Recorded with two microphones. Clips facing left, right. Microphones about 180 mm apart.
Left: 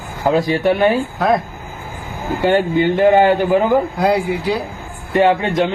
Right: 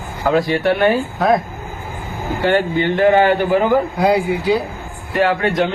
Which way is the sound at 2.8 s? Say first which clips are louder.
Left 2 dB; centre (ahead or behind).